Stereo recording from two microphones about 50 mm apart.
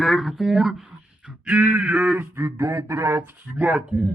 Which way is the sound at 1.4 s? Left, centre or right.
Right.